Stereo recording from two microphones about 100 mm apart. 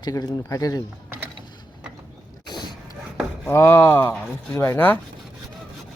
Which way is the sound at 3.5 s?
30° left (ahead or behind).